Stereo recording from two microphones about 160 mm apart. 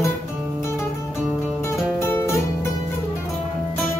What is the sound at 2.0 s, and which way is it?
Music, 15° left (ahead or behind).